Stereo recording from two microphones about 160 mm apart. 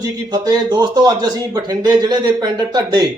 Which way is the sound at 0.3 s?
25° right (ahead or behind).